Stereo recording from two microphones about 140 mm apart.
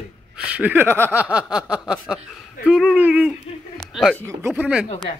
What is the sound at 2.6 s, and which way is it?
Speech, centre (ahead or behind).